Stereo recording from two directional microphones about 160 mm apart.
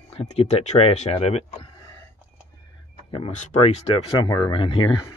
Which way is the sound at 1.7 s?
20° left (ahead or behind).